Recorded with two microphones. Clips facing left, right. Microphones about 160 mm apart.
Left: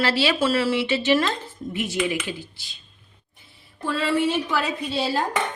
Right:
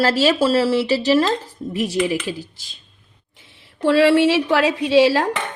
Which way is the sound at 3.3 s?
90° right.